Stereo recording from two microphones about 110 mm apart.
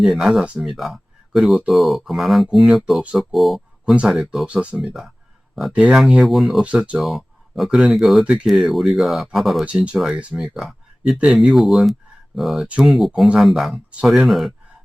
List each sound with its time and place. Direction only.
0.0 s speech: centre (ahead or behind)